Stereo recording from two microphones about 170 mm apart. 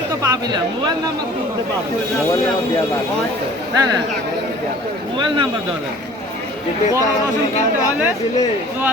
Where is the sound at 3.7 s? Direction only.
25° right (ahead or behind).